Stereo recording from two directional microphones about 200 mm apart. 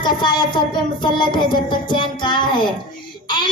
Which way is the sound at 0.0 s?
20° left (ahead or behind).